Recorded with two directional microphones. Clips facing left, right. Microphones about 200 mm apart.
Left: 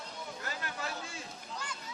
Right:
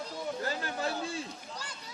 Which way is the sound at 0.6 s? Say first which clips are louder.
Right 6 dB; 30° right (ahead or behind).